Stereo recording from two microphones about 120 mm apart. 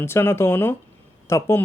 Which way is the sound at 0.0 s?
20° left (ahead or behind).